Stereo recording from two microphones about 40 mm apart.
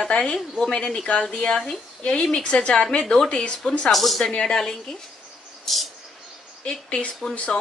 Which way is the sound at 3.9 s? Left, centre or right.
Centre.